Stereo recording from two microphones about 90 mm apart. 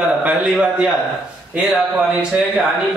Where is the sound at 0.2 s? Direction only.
15° right (ahead or behind).